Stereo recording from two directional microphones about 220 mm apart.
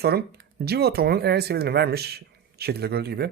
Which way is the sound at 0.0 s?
45° right (ahead or behind).